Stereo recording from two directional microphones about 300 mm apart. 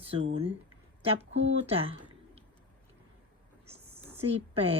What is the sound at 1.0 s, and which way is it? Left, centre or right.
A woman's voice, right.